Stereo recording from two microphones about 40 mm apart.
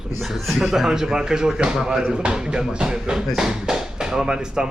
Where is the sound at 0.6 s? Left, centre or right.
Centre.